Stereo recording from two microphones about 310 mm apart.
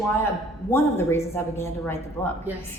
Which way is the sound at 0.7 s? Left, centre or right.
Centre.